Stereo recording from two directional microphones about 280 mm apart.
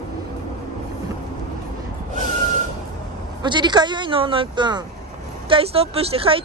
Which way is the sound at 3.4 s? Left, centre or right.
Centre.